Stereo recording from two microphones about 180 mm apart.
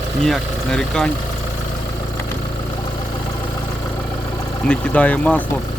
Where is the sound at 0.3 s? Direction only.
Centre (ahead or behind).